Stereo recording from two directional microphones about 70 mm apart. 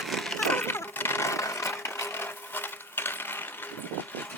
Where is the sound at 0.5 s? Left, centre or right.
Left.